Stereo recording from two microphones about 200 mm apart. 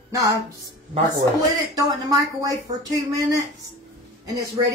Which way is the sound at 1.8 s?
15° right (ahead or behind).